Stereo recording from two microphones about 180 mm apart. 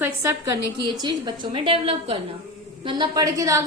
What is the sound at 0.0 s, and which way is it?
A woman's voice, 15° right (ahead or behind).